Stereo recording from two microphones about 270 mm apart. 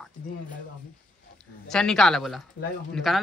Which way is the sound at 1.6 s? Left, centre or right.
Centre.